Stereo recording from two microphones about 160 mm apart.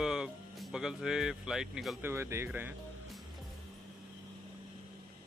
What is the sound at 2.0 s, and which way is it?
Speech, 15° right (ahead or behind).